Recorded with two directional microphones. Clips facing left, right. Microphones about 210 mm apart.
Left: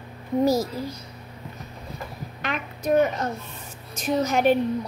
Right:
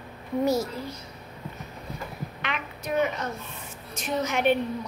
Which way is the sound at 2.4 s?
45° left (ahead or behind).